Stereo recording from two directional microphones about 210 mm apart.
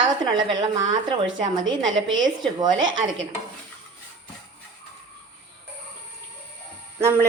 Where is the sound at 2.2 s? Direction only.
20° right (ahead or behind).